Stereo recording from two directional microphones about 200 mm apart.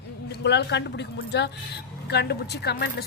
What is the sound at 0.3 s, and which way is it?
Speech, 60° left (ahead or behind).